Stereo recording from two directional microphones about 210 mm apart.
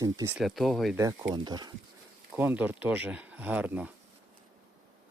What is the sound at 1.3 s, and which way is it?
Speech, 20° right (ahead or behind).